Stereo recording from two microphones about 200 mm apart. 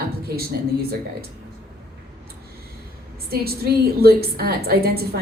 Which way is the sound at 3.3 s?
50° right (ahead or behind).